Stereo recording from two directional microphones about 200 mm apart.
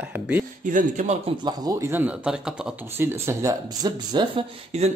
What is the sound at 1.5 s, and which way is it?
Speech, 15° right (ahead or behind).